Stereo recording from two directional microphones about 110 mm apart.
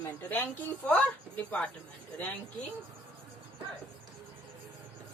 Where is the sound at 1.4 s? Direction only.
10° left (ahead or behind).